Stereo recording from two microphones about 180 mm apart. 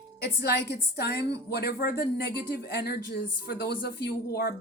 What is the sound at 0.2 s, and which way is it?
Speech, 65° left (ahead or behind).